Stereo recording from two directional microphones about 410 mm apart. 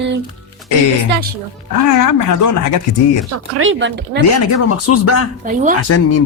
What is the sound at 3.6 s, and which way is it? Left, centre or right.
Speech, right.